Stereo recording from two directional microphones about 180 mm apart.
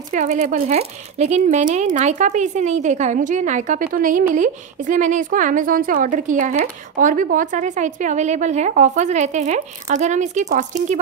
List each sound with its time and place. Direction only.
0.1 s speech: 45° right (ahead or behind)